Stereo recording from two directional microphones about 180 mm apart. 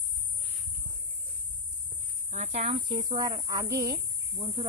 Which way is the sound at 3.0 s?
20° right (ahead or behind).